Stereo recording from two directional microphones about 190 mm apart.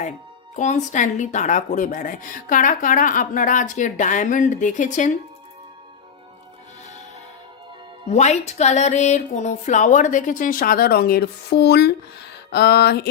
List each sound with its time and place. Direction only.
0.5 s speech: 40° left (ahead or behind)
8.1 s speech: 35° left (ahead or behind); by 11.9 s 60° left (ahead or behind)
12.5 s a sound: 60° left (ahead or behind)